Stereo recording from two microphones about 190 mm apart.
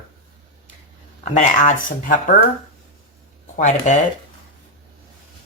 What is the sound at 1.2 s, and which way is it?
Speech, 40° left (ahead or behind).